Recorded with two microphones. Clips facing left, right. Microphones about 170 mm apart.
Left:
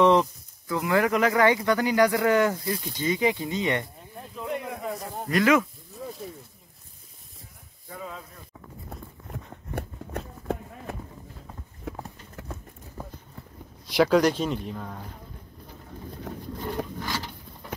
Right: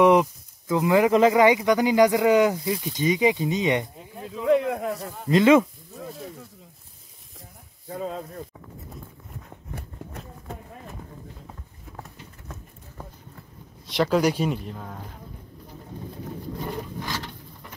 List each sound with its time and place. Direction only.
0.0 s speech: 15° right (ahead or behind)
4.5 s speech: 90° right
4.9 s speech: 35° left (ahead or behind)
5.3 s speech: 25° right (ahead or behind)
7.9 s speech: 40° right (ahead or behind)
9.8 s run: 75° left (ahead or behind)
11.9 s clip-clop: 80° left
13.8 s speech: centre (ahead or behind)